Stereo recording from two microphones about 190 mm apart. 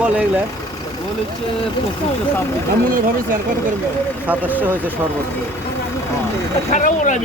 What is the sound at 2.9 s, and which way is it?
Speech, 45° right (ahead or behind).